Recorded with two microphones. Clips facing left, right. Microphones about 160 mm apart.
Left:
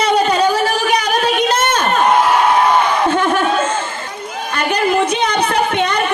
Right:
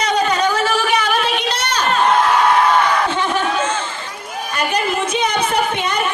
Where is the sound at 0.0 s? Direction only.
30° left (ahead or behind); by 1.9 s 50° left (ahead or behind).